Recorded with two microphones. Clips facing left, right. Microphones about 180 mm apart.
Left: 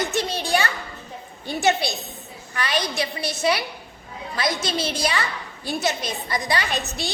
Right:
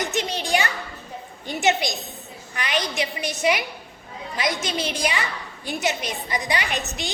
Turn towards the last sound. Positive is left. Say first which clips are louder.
# left 1 dB
turn(degrees=-15)  # may be behind; listen again after turning